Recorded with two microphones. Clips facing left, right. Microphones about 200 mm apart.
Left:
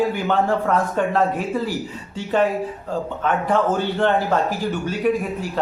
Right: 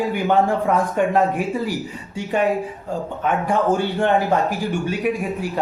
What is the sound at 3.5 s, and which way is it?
A man's voice, 10° right (ahead or behind).